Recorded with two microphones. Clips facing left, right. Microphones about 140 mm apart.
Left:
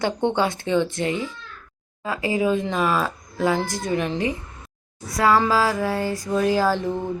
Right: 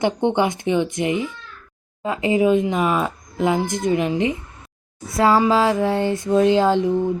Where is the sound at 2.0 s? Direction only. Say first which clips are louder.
Right 4 dB; 20° right (ahead or behind).